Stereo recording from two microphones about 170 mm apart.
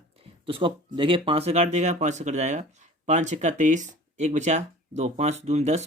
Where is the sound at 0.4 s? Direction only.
30° right (ahead or behind).